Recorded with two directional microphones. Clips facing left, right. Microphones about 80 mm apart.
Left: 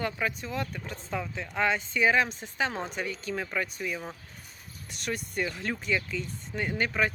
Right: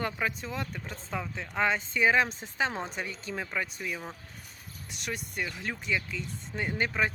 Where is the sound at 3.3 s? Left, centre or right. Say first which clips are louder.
Left 1 dB; centre.